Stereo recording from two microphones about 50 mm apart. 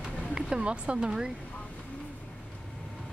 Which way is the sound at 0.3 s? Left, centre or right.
Centre.